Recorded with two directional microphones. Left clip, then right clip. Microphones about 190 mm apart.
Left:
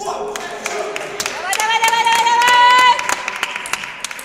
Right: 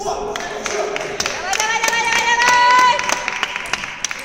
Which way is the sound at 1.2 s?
40° left (ahead or behind).